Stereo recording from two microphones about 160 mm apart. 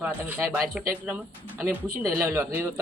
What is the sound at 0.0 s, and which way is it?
Speech, 10° right (ahead or behind).